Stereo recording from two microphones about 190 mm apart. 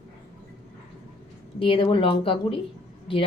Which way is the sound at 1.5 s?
30° left (ahead or behind).